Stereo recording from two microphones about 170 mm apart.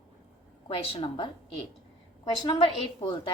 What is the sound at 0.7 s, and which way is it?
A woman's voice, 35° left (ahead or behind).